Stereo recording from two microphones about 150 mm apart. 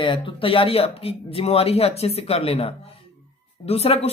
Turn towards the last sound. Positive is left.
turn(degrees=45)  # may be behind; listen again after turning